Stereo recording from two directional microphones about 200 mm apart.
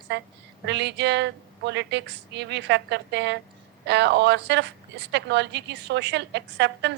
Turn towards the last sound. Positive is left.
turn(degrees=-60)  # may be behind; listen again after turning